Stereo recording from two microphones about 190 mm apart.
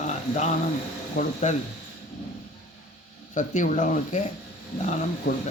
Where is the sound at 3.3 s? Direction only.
40° left (ahead or behind).